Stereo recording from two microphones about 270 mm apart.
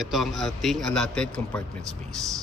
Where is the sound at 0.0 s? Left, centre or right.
Centre.